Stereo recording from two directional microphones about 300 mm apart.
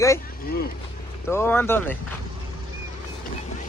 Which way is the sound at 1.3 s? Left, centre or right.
Centre.